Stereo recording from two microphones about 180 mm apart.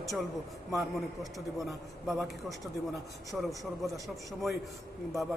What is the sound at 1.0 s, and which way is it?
A man's voice, centre (ahead or behind).